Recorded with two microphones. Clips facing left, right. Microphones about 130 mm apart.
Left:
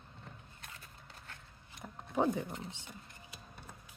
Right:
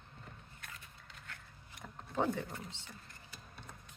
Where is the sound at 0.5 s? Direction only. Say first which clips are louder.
Even; 30° left (ahead or behind).